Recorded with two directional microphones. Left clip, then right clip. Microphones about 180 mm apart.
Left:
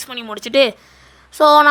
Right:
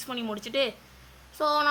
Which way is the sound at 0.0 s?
45° left (ahead or behind).